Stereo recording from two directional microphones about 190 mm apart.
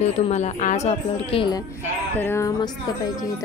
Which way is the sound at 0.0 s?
35° left (ahead or behind).